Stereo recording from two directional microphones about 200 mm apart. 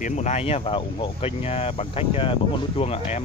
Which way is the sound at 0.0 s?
35° left (ahead or behind).